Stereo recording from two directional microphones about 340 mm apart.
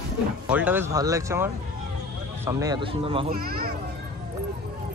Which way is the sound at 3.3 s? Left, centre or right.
Right.